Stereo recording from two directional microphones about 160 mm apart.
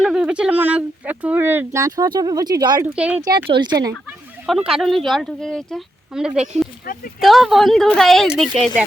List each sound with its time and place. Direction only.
0.0 s speech: 5° right (ahead or behind); by 2.8 s 25° right (ahead or behind)
2.8 s speech: 10° right (ahead or behind)
3.5 s speech: 30° right (ahead or behind)
4.4 s speech: centre (ahead or behind)